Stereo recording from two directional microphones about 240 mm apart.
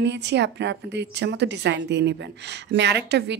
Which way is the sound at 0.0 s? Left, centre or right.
Right.